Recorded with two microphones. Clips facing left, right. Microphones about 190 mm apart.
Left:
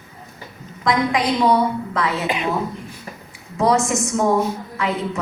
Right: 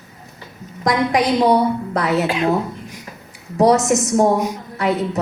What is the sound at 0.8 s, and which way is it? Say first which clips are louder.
A woman's voice: right 2 dB; 40° right (ahead or behind).